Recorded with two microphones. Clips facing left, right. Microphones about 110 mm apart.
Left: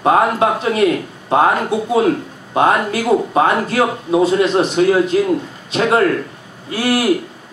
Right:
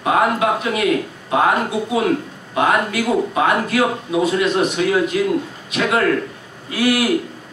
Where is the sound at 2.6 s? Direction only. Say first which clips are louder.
Left 3 dB; 30° left (ahead or behind).